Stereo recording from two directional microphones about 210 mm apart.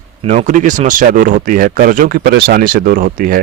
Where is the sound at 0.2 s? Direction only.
30° right (ahead or behind).